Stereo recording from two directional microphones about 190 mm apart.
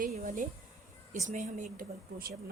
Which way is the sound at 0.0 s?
45° right (ahead or behind).